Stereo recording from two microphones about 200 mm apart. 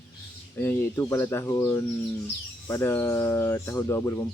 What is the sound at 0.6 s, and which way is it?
Speech, 10° left (ahead or behind).